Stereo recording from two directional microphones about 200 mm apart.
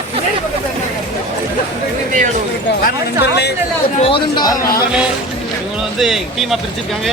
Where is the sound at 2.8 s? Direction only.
55° left (ahead or behind).